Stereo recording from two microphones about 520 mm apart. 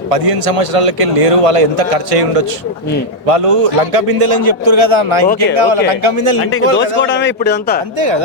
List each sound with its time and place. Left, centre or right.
0.1 s a man's voice: right
3.2 s a man's voice: right
7.0 s a man's voice: left